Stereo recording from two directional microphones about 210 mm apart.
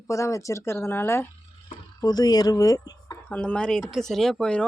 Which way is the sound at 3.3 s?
5° left (ahead or behind).